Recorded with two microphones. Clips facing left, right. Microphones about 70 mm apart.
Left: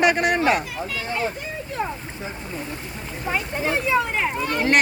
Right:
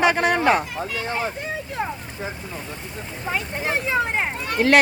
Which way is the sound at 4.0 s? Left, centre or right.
Right.